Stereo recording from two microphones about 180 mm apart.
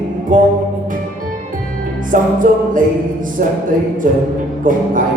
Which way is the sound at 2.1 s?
45° right (ahead or behind).